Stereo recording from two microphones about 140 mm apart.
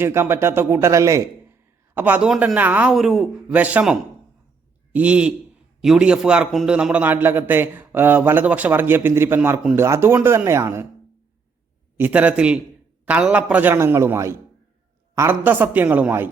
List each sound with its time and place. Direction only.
0.0 s a man's voice: 15° right (ahead or behind)
2.0 s a man's voice: 10° right (ahead or behind)
4.9 s a man's voice: 10° right (ahead or behind)
11.9 s a man's voice: 10° right (ahead or behind)